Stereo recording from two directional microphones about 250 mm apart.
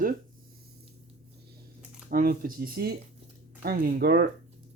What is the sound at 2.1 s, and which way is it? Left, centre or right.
Speech, right.